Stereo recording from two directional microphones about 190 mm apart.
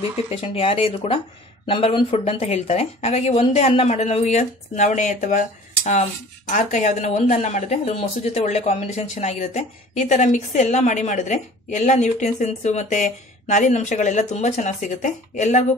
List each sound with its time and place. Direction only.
0.3 s speech: 30° left (ahead or behind)
6.5 s speech: 40° left (ahead or behind)